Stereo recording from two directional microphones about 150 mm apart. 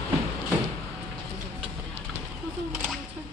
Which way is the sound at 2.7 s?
5° right (ahead or behind).